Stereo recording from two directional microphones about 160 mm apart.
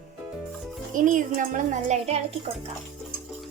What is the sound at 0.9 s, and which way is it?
A woman's voice, 55° right (ahead or behind).